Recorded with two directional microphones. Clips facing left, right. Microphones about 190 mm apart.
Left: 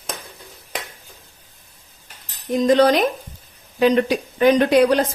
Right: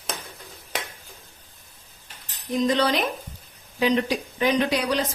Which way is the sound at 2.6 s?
45° left (ahead or behind).